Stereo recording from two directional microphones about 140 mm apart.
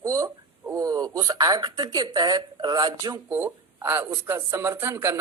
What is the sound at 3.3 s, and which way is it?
Speech, 15° right (ahead or behind).